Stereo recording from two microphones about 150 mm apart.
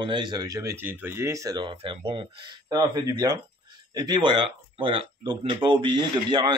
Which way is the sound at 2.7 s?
25° right (ahead or behind).